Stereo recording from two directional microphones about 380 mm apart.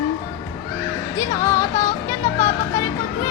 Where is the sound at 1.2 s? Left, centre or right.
Centre.